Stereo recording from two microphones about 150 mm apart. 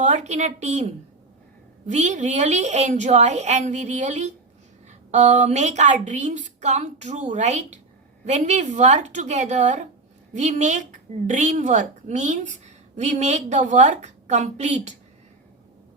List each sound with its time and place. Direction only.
0.0 s a woman's voice: 50° right (ahead or behind)